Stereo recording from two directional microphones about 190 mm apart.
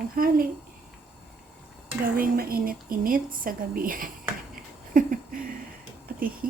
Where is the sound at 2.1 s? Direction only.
50° right (ahead or behind).